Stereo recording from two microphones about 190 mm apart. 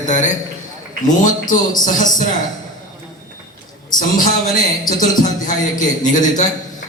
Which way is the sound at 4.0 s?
45° left (ahead or behind).